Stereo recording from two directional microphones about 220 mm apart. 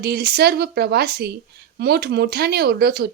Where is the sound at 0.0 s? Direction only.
45° right (ahead or behind).